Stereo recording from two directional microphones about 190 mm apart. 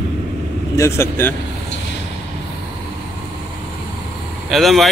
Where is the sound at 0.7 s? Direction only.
15° left (ahead or behind).